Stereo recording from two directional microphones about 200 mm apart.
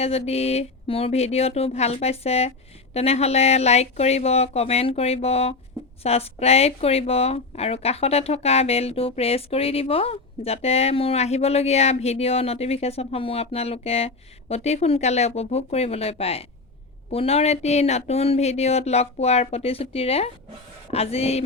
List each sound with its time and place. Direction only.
0.0 s speech: 30° left (ahead or behind)